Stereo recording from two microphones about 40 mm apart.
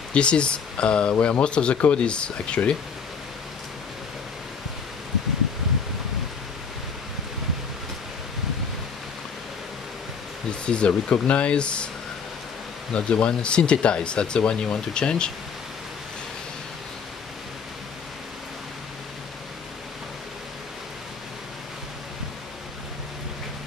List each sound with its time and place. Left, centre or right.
0.1 s speech: left
10.6 s speech: left
12.9 s speech: left